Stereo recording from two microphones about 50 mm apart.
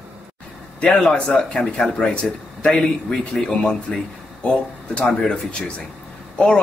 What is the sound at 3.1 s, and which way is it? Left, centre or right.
Speech, centre.